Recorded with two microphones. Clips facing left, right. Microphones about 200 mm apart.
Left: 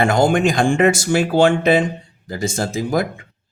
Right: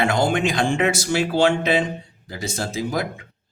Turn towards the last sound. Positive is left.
turn(degrees=50)  # may be behind; listen again after turning